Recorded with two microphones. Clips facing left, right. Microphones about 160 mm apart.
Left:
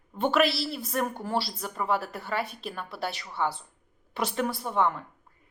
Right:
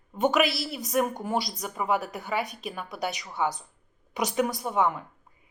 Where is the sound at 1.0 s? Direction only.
15° right (ahead or behind).